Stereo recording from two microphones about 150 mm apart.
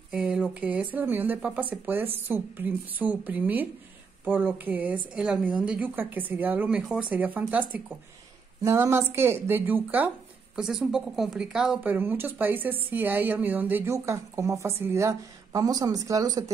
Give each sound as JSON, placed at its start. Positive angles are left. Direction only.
{"t": 0.1, "sound": "speech", "side_deg": -5}